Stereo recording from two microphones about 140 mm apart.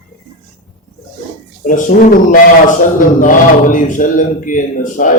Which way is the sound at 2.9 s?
70° left (ahead or behind).